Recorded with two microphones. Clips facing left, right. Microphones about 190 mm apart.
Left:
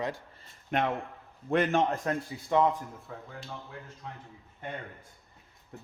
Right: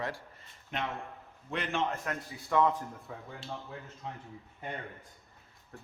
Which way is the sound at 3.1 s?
5° right (ahead or behind).